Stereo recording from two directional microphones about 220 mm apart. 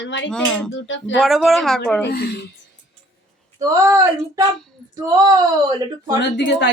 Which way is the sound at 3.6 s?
15° right (ahead or behind).